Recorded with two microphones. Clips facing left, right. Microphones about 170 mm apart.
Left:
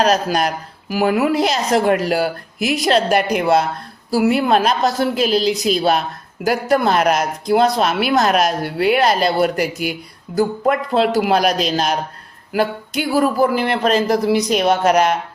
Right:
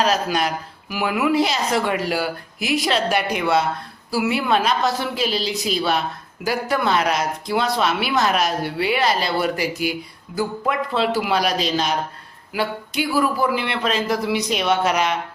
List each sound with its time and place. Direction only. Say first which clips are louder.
0.0 s speech: left 4 dB; 45° left (ahead or behind)
12.5 s speech: left 4 dB; 45° left (ahead or behind)